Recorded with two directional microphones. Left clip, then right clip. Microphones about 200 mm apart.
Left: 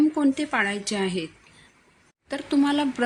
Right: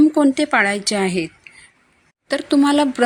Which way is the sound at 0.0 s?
45° right (ahead or behind).